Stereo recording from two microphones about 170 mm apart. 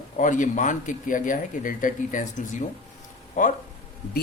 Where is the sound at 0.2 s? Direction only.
50° left (ahead or behind).